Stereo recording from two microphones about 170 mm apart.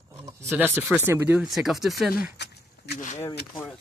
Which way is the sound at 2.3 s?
80° left.